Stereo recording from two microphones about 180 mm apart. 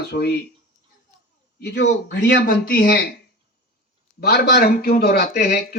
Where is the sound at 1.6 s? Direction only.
80° left.